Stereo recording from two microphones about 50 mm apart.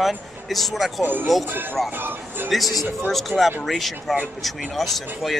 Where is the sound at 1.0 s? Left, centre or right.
Right.